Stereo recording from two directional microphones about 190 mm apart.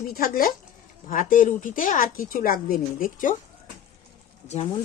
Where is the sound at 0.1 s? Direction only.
50° left (ahead or behind).